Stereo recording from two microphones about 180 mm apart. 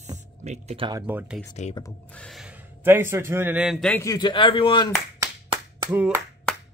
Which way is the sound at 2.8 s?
15° right (ahead or behind).